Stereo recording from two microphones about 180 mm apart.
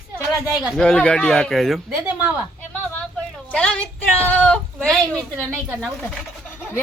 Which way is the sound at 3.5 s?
5° left (ahead or behind).